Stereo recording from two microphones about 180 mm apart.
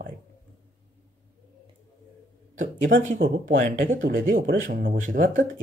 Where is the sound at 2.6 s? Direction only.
45° right (ahead or behind).